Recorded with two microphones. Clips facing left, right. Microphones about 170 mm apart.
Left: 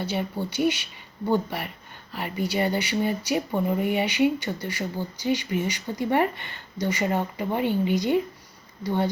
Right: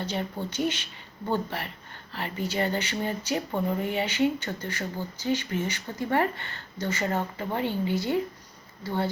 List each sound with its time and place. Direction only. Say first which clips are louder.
0.0 s speech: left 3 dB; 10° left (ahead or behind)